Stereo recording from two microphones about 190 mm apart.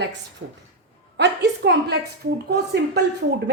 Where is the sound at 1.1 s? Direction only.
65° right (ahead or behind).